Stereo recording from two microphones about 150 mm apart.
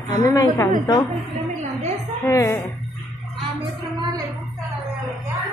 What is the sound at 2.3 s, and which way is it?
Speech, 15° left (ahead or behind).